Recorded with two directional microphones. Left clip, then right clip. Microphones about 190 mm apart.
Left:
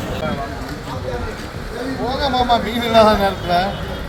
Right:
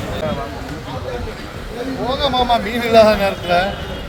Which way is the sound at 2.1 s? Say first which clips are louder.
Right 1 dB; 20° right (ahead or behind).